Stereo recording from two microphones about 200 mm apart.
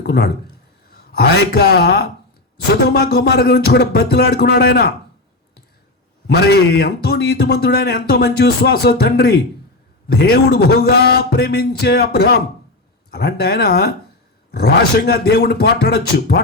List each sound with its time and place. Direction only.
0.0 s a sound: 55° left (ahead or behind)
0.9 s a man's voice: 55° left (ahead or behind)
6.2 s a man's voice: 55° left (ahead or behind)